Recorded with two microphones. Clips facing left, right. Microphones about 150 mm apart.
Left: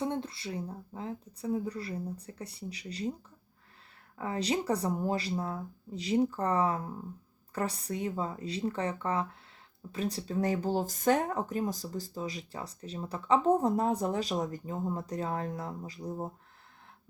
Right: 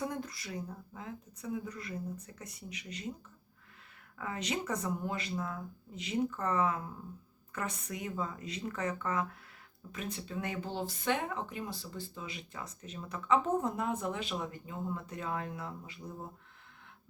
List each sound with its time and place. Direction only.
0.0 s speech: 30° left (ahead or behind)
4.2 s speech: 35° left (ahead or behind)